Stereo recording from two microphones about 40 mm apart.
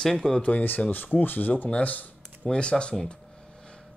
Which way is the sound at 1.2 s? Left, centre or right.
Left.